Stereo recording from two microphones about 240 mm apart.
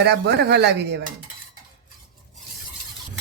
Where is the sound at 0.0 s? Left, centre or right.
Right.